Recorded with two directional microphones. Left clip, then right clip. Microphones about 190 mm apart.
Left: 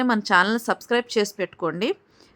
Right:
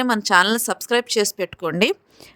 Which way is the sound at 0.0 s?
50° right (ahead or behind).